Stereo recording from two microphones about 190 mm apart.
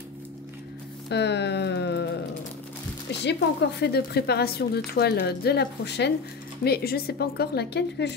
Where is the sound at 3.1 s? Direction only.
65° left (ahead or behind).